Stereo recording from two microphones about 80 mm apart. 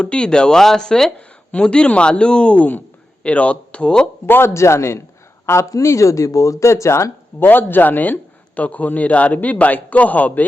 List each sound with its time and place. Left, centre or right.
0.0 s speech: centre
4.3 s a man's voice: left